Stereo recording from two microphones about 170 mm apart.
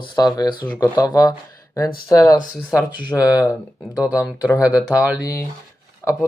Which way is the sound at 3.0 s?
20° left (ahead or behind).